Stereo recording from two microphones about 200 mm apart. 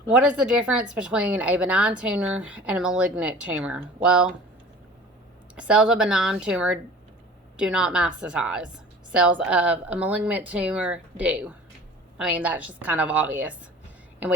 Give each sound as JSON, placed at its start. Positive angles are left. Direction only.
{"t": 0.1, "sound": "speech", "side_deg": -5}
{"t": 5.5, "sound": "speech", "side_deg": -5}